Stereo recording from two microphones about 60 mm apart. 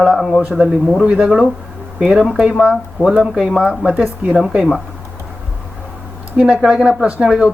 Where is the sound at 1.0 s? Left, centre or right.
Centre.